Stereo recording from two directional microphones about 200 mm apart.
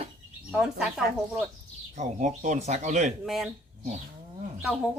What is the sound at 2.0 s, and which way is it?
Speech, 35° right (ahead or behind).